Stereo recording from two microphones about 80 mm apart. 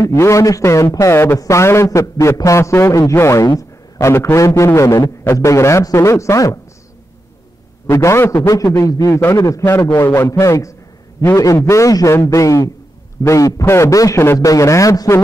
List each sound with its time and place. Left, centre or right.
0.0 s a man's voice: left
5.0 s a man's voice: left
5.4 s a man's voice: left
7.8 s a man's voice: left